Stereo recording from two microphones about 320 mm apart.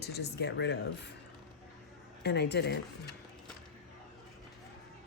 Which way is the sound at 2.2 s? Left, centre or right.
Left.